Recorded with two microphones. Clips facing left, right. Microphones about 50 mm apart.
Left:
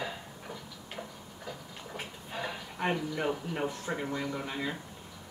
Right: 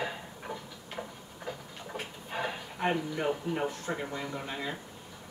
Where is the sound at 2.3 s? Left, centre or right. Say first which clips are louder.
Right 3 dB; centre.